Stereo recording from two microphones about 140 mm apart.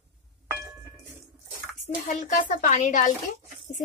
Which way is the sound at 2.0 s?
60° left (ahead or behind).